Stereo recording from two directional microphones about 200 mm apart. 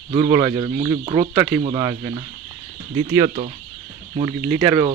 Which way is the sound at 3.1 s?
30° right (ahead or behind).